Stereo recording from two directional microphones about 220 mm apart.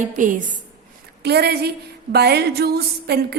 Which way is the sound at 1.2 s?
45° right (ahead or behind).